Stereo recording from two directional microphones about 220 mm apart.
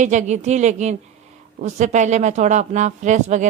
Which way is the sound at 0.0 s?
35° right (ahead or behind).